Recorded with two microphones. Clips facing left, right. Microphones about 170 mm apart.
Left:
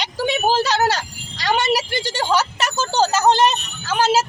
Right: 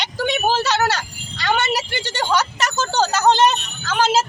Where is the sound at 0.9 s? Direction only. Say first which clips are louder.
Even; 35° left (ahead or behind).